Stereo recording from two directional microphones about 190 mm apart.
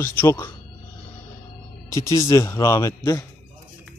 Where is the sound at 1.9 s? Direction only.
15° left (ahead or behind).